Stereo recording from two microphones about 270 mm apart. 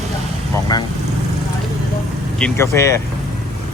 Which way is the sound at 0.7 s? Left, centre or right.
Centre.